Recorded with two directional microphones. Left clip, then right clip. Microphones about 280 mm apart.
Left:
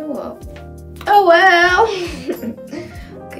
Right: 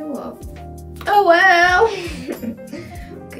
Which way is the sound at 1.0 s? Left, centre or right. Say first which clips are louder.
Left 2 dB; centre.